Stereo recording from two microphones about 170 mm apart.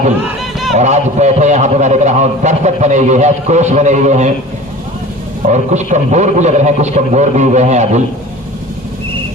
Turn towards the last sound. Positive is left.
turn(degrees=-45)  # may be behind; listen again after turning